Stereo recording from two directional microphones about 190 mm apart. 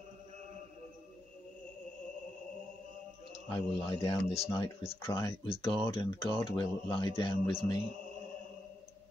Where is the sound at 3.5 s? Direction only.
25° left (ahead or behind).